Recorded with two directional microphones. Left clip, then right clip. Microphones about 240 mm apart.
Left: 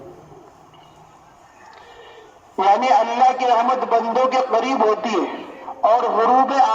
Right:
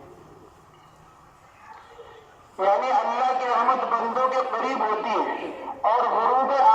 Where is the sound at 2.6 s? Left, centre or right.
Left.